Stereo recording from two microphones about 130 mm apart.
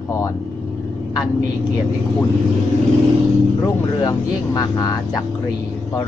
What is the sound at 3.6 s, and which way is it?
Speech, 30° left (ahead or behind).